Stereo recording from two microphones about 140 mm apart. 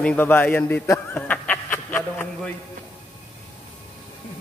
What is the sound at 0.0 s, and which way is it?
A man's voice, 10° left (ahead or behind).